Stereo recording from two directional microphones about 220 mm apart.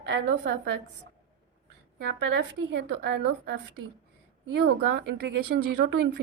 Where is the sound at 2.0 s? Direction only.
50° right (ahead or behind).